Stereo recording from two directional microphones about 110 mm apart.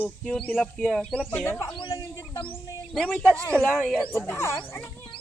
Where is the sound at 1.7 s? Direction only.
45° left (ahead or behind).